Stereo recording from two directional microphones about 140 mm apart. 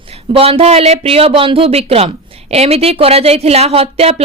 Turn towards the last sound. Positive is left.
turn(degrees=-45)  # may be behind; listen again after turning